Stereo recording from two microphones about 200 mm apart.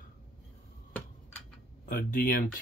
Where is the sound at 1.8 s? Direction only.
45° left (ahead or behind).